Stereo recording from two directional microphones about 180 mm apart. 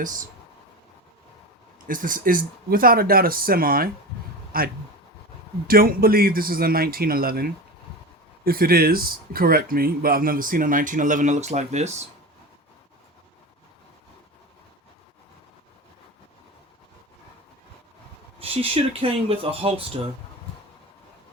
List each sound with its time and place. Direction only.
1.9 s a man's voice: 50° right (ahead or behind)
18.3 s speech: 30° right (ahead or behind)